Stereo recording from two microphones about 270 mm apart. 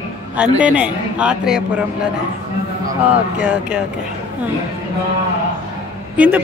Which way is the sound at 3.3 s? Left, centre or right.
Centre.